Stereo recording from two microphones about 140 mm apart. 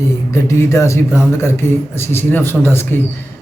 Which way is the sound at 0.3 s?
20° left (ahead or behind).